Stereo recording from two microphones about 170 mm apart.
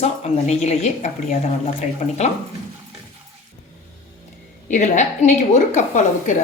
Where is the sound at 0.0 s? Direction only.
40° left (ahead or behind).